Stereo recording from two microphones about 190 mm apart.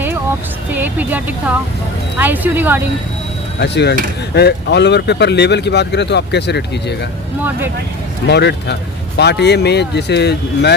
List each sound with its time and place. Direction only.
0.7 s speech: 10° right (ahead or behind)
3.6 s speech: 60° left (ahead or behind)
8.3 s speech: 65° left (ahead or behind)